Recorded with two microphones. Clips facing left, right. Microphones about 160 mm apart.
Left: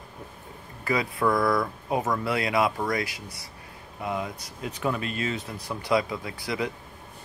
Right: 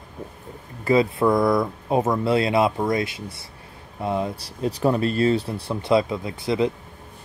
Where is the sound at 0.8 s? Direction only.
25° right (ahead or behind).